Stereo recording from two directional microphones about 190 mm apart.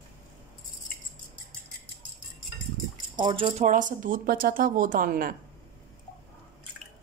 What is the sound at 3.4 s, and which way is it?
A woman's voice, 40° right (ahead or behind).